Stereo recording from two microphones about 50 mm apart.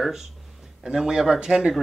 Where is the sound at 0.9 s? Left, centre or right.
Centre.